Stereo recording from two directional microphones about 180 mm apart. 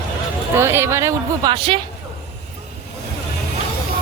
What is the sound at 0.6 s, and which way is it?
Speech, 15° right (ahead or behind).